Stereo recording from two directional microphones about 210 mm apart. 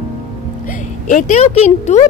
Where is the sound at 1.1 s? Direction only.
35° left (ahead or behind).